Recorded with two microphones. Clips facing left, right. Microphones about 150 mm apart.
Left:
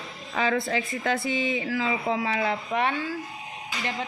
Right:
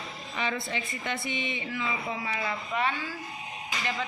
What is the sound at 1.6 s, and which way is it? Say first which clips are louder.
Speech: left 6 dB; 90° left.